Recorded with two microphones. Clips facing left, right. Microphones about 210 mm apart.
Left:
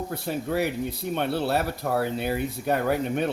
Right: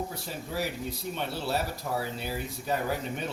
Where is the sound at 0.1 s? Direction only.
60° left (ahead or behind).